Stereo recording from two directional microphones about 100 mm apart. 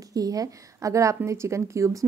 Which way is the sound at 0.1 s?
40° right (ahead or behind).